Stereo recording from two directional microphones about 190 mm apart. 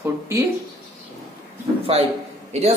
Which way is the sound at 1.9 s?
30° right (ahead or behind).